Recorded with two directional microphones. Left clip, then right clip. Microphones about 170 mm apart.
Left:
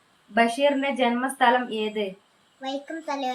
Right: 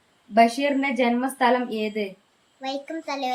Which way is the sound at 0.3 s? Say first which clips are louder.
Right 2 dB; 20° right (ahead or behind).